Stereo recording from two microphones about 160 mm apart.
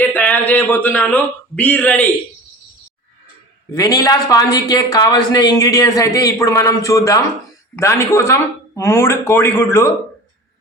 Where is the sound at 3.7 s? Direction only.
20° left (ahead or behind).